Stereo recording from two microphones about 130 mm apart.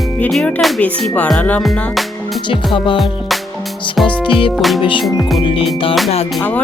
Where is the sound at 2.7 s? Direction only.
40° left (ahead or behind).